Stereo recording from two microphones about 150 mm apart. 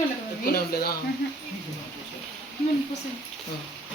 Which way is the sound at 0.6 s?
90° left.